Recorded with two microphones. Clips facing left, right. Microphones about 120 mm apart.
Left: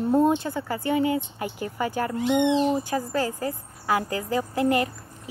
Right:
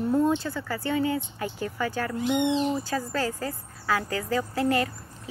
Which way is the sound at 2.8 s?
15° left (ahead or behind).